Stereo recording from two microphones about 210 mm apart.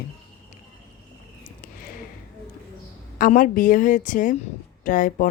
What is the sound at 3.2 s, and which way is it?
Speech, 40° left (ahead or behind).